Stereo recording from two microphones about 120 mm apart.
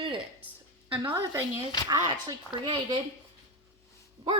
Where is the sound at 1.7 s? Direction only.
35° left (ahead or behind).